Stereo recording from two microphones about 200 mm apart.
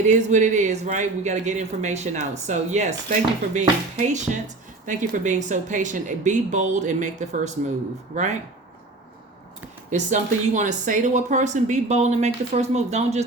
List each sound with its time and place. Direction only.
0.1 s speech: 35° right (ahead or behind)
9.9 s speech: 35° right (ahead or behind)